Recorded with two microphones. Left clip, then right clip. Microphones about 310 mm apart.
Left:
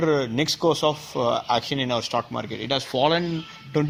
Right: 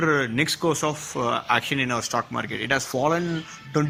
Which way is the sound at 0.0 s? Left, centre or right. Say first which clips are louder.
Even; centre.